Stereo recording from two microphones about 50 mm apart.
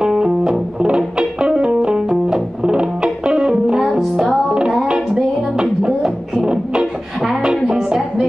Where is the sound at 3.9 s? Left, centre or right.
Centre.